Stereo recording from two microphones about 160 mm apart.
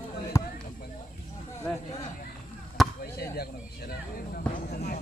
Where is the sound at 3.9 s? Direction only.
65° left (ahead or behind).